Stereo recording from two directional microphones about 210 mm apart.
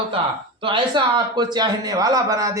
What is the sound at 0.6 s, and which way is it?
A man's voice, 25° right (ahead or behind).